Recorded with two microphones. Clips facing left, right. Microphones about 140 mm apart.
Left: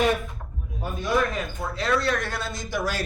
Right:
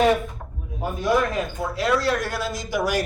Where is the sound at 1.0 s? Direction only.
Centre (ahead or behind).